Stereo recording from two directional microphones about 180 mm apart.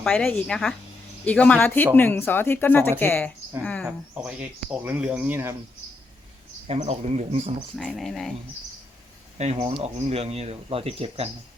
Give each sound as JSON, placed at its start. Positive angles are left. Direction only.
{"t": 0.0, "sound": "speech", "side_deg": 5}
{"t": 3.8, "sound": "speech", "side_deg": -5}
{"t": 6.7, "sound": "speech", "side_deg": -40}
{"t": 7.8, "sound": "speech", "side_deg": 5}
{"t": 9.4, "sound": "speech", "side_deg": -35}